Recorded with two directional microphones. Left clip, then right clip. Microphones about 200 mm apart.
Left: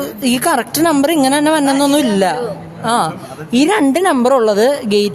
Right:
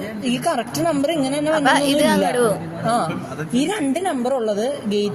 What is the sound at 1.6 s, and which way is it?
Speech, 35° right (ahead or behind).